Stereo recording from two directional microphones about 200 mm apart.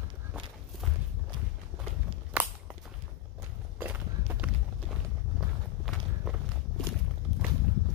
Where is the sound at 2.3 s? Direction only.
5° right (ahead or behind).